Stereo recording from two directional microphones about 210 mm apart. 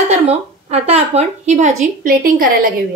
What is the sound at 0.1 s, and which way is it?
A woman's voice, 30° right (ahead or behind).